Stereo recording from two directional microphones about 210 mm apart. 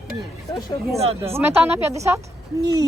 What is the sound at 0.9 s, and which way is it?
Speech, 30° right (ahead or behind).